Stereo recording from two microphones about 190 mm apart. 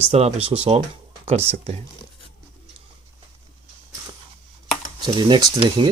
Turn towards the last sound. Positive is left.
turn(degrees=-25)  # may be behind; listen again after turning